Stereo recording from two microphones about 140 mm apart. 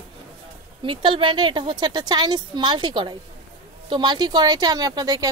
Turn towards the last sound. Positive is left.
turn(degrees=-25)  # may be behind; listen again after turning